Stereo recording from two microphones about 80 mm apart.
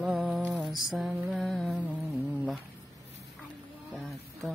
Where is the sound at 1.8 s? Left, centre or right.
Centre.